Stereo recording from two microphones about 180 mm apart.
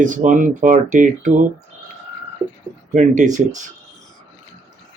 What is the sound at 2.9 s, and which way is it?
Speech, 40° right (ahead or behind).